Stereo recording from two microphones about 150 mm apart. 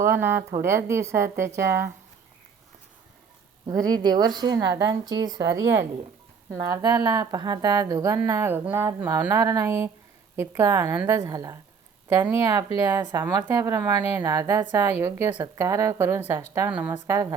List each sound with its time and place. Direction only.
0.0 s speech: 15° right (ahead or behind)
3.7 s a woman's voice: 25° right (ahead or behind); by 17.0 s 10° right (ahead or behind)
17.1 s a woman's voice: 20° right (ahead or behind)